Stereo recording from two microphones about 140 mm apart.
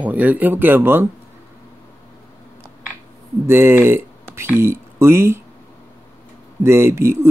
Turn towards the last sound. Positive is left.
turn(degrees=-20)  # may be behind; listen again after turning